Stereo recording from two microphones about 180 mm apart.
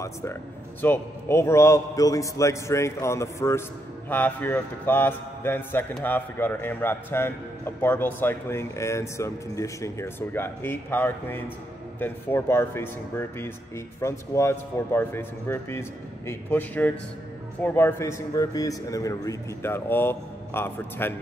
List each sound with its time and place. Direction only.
0.0 s a man's voice: 15° left (ahead or behind)